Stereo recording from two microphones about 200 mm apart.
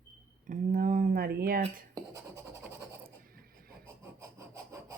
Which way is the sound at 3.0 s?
45° right (ahead or behind).